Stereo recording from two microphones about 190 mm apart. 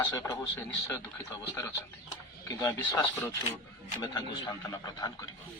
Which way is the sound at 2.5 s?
15° left (ahead or behind).